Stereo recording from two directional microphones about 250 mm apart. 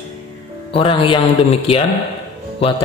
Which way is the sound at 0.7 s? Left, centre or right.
Left.